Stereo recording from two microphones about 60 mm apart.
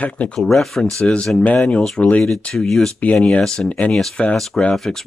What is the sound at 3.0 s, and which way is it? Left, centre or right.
Speech, left.